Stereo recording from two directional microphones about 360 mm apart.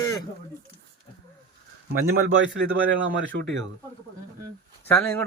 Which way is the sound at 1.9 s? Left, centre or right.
Right.